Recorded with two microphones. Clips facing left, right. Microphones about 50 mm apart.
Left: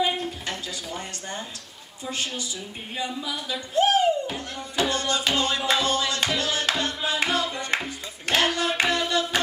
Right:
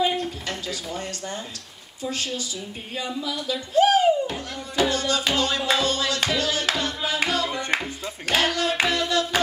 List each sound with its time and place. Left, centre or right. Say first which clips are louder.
0.2 s a sound: right 1 dB; centre
3.0 s speech: right 1 dB; left
3.7 s music: right 3 dB; centre
7.4 s music: right 3 dB; right
7.7 s music: right 2 dB; centre